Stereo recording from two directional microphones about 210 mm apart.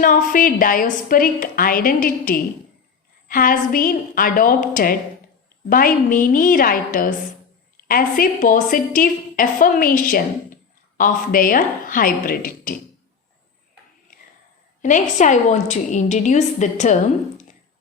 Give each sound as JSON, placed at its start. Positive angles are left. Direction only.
{"t": 0.0, "sound": "a woman's voice", "side_deg": 40}
{"t": 14.8, "sound": "a woman's voice", "side_deg": 35}